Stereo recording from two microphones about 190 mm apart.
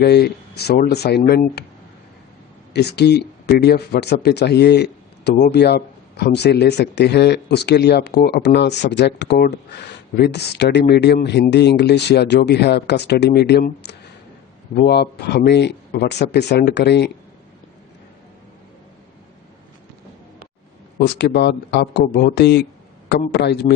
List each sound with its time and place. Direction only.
0.0 s speech: 60° left (ahead or behind)
2.7 s speech: 60° left (ahead or behind)
21.0 s speech: 60° left (ahead or behind)